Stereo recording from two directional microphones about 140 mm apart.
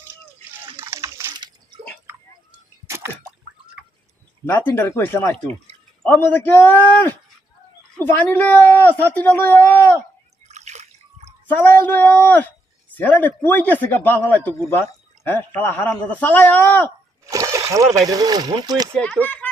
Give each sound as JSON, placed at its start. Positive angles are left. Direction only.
{"t": 0.5, "sound": "a sound", "side_deg": -20}
{"t": 2.8, "sound": "drip", "side_deg": -20}
{"t": 4.4, "sound": "a man's voice", "side_deg": 15}
{"t": 8.3, "sound": "a man's voice", "side_deg": 10}
{"t": 10.5, "sound": "water", "side_deg": -55}
{"t": 11.4, "sound": "a man's voice", "side_deg": 10}
{"t": 17.2, "sound": "speech", "side_deg": -25}
{"t": 18.9, "sound": "a man's voice", "side_deg": 10}